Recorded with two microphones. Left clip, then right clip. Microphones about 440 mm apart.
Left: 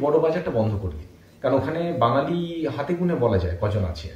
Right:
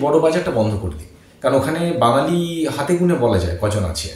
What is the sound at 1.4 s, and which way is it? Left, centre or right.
Speech, left.